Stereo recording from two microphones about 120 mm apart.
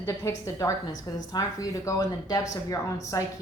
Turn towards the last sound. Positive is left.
turn(degrees=30)  # may be behind; listen again after turning